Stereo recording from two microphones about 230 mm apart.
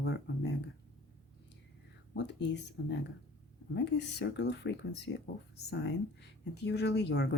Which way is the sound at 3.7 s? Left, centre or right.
Left.